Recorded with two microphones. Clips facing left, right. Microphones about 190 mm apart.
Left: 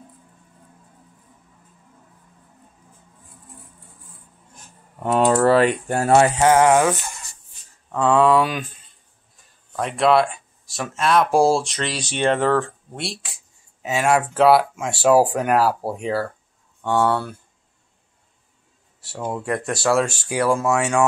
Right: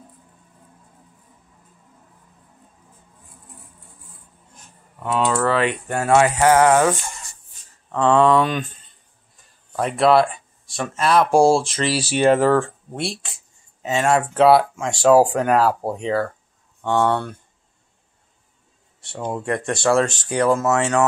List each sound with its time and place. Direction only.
5.0 s speech: 45° left (ahead or behind)
6.4 s a sound: 15° left (ahead or behind)
7.9 s speech: 5° left (ahead or behind)
9.7 s speech: centre (ahead or behind)
18.9 s speech: 5° left (ahead or behind)
20.5 s a sound: 10° left (ahead or behind)